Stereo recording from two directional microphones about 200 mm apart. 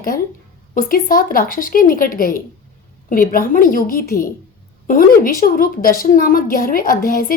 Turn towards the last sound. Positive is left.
turn(degrees=45)  # may be behind; listen again after turning